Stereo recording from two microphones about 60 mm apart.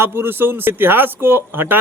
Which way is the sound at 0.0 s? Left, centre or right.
Right.